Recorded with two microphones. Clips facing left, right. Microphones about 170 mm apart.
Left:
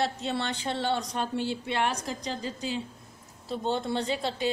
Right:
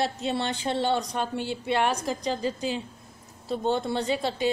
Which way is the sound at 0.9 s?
55° right (ahead or behind).